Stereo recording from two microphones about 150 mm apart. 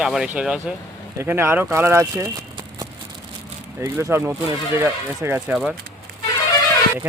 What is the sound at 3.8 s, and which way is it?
Speech, 15° right (ahead or behind).